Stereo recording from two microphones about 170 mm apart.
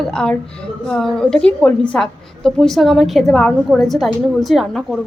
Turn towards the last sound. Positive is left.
turn(degrees=0)  # may be behind; listen again after turning